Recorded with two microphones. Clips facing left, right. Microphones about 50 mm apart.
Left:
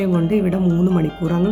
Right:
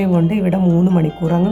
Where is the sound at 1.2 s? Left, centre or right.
Centre.